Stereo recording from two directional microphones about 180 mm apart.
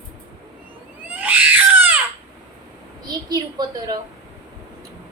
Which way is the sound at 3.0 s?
20° right (ahead or behind).